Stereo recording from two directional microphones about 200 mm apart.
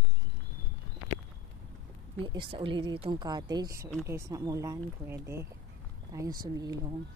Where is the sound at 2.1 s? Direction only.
25° right (ahead or behind).